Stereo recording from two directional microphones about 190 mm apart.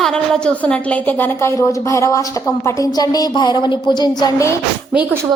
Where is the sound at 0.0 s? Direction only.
5° left (ahead or behind).